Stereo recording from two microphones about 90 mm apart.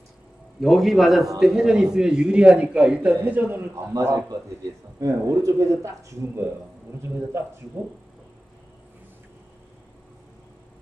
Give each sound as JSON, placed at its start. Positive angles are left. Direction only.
{"t": 0.6, "sound": "a man's voice", "side_deg": 0}
{"t": 3.7, "sound": "speech", "side_deg": -35}